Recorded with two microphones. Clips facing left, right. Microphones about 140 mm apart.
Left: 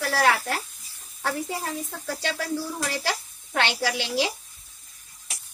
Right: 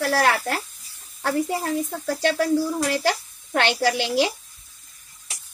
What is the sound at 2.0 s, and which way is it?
Speech, 50° right (ahead or behind).